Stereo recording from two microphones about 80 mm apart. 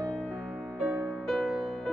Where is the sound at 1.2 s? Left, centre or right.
Centre.